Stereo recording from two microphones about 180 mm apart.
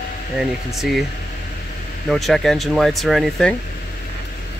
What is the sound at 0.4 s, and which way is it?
Speech, centre (ahead or behind).